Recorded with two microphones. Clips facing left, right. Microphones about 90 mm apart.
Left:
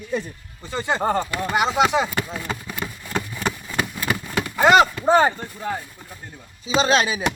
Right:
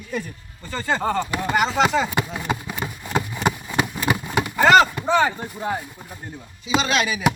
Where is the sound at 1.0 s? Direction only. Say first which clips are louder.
Left 3 dB; 45° left (ahead or behind).